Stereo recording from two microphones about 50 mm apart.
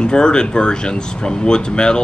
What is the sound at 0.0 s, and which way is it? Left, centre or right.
Speech, centre.